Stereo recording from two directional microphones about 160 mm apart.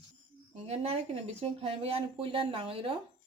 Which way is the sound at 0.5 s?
40° right (ahead or behind).